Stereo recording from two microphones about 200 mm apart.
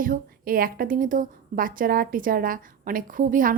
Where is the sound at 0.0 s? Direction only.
45° right (ahead or behind).